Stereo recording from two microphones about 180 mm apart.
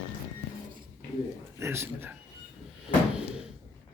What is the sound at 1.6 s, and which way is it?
Speech, 15° right (ahead or behind).